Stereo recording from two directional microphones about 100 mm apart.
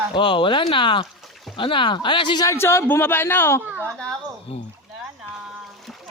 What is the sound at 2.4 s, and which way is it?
Speech, 25° left (ahead or behind).